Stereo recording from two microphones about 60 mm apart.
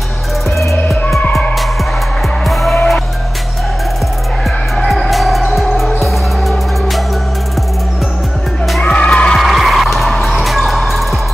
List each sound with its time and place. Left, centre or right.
2.4 s music: centre
4.7 s music: centre
8.8 s music: centre
9.4 s music: centre